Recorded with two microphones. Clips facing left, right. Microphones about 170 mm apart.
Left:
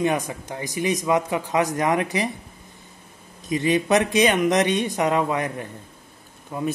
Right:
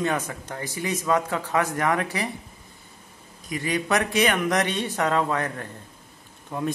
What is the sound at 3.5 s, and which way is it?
A man's voice, 20° left (ahead or behind).